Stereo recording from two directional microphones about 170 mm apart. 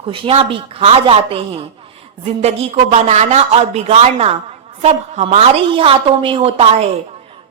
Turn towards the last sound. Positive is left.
turn(degrees=-35)  # may be behind; listen again after turning